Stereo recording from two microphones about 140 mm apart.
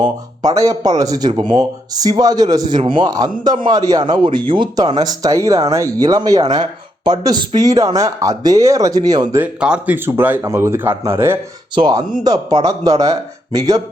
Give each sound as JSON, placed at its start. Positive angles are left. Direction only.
{"t": 0.0, "sound": "speech", "side_deg": -25}
{"t": 9.4, "sound": "speech", "side_deg": -5}
{"t": 11.7, "sound": "speech", "side_deg": -30}